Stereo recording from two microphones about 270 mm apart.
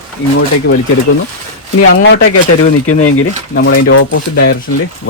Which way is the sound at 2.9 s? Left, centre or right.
Left.